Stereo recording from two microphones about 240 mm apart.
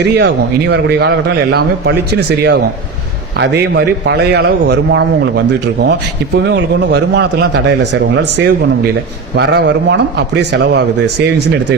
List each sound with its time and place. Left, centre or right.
0.0 s a man's voice: right